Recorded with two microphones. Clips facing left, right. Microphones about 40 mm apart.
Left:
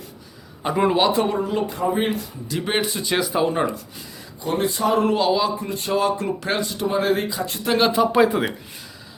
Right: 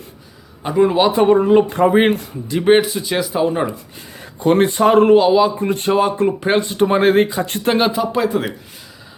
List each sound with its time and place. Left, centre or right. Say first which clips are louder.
0.6 s speech: right 5 dB; centre
1.1 s speech: right 10 dB; right
1.7 s speech: right 9 dB; right
2.0 s speech: right 8 dB; right
2.5 s speech: right 11 dB; right
2.8 s speech: right 2 dB; centre
4.4 s speech: right 9 dB; right
5.1 s a man's voice: right 8 dB; centre
5.5 s speech: right 9 dB; right
5.9 s speech: right 5 dB; right
6.8 s speech: right 8 dB; right
7.8 s speech: left 1 dB; centre
8.1 s speech: left 1 dB; centre